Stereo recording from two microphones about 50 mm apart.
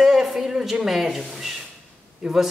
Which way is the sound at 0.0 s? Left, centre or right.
Centre.